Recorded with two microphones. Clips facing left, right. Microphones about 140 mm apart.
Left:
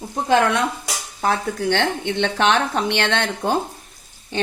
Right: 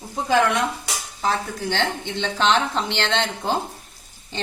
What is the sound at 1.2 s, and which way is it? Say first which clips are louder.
Speech: left 3 dB; 60° left (ahead or behind).